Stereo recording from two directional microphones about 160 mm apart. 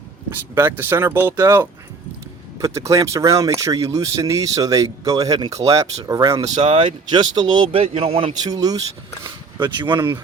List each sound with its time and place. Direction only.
0.3 s speech: 15° right (ahead or behind)
6.6 s speech: 30° right (ahead or behind)
8.4 s speech: 25° right (ahead or behind)
9.9 s speech: 15° right (ahead or behind)